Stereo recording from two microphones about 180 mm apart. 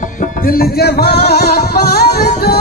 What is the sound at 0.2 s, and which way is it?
Music, 55° left (ahead or behind).